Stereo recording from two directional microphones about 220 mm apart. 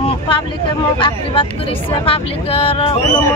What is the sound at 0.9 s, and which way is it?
Speech, 25° left (ahead or behind).